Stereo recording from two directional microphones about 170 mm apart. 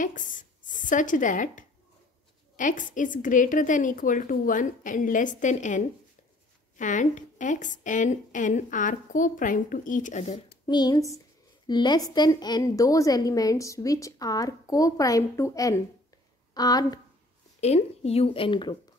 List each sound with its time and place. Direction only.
0.0 s a woman's voice: 50° left (ahead or behind)
10.7 s a woman's voice: 25° left (ahead or behind)
17.6 s a woman's voice: 40° left (ahead or behind)